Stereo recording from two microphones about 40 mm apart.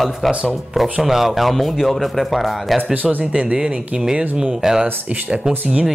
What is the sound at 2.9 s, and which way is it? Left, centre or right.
Speech, right.